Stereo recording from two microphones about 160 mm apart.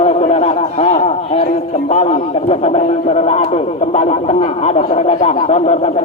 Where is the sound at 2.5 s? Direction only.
40° left (ahead or behind).